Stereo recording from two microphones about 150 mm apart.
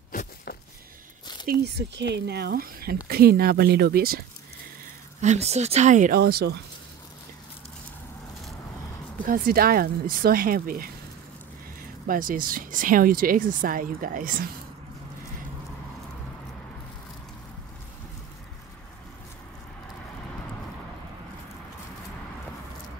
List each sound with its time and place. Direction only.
0.1 s a sound: 65° left (ahead or behind)
1.5 s speech: 90° right
5.2 s speech: 50° right (ahead or behind)
6.1 s speech: 90° right
9.2 s speech: 70° right (ahead or behind)
12.1 s speech: 70° right (ahead or behind)